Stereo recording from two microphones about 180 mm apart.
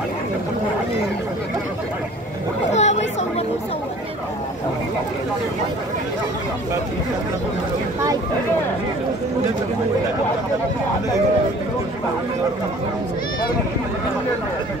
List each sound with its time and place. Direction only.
2.7 s chatter: 40° left (ahead or behind)